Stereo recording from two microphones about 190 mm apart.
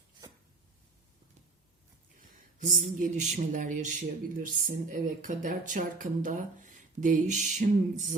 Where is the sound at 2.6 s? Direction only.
45° right (ahead or behind).